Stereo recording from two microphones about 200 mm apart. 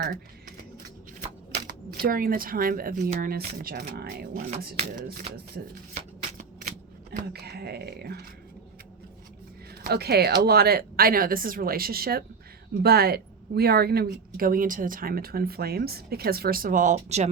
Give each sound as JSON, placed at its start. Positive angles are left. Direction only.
{"t": 0.0, "sound": "a sound", "side_deg": -45}
{"t": 1.5, "sound": "speech", "side_deg": -45}
{"t": 6.3, "sound": "shuffling cards", "side_deg": -45}
{"t": 9.8, "sound": "speech", "side_deg": -50}